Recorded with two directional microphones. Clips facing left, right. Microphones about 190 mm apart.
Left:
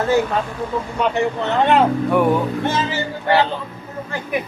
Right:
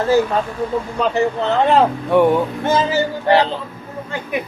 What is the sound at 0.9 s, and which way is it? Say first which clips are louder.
Speech: right 1 dB; 35° right (ahead or behind).